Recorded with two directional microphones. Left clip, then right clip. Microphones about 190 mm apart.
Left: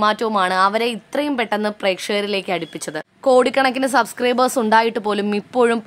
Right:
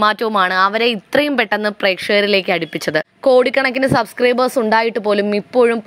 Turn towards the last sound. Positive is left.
turn(degrees=-5)  # may be behind; listen again after turning